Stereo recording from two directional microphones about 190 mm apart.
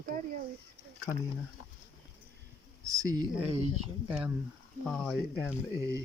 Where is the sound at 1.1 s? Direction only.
25° left (ahead or behind).